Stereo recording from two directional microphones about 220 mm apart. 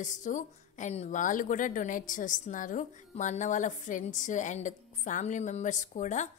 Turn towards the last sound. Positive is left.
turn(degrees=35)  # may be behind; listen again after turning